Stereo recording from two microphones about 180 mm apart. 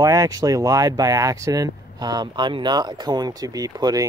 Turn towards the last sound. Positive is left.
turn(degrees=-20)  # may be behind; listen again after turning